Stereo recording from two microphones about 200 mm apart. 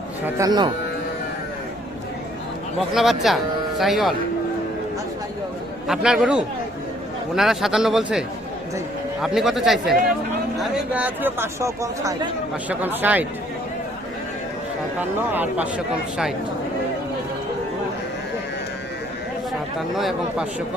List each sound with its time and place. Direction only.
0.3 s speech: 20° right (ahead or behind)
2.9 s speech: centre (ahead or behind)
5.9 s speech: 5° right (ahead or behind)
9.2 s speech: centre (ahead or behind)
15.3 s speech: 10° right (ahead or behind)
20.0 s speech: 5° right (ahead or behind)